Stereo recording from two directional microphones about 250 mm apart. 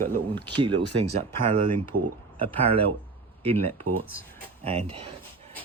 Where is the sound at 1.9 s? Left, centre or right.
Right.